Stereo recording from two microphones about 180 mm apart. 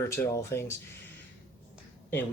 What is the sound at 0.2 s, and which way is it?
Speech, 15° left (ahead or behind).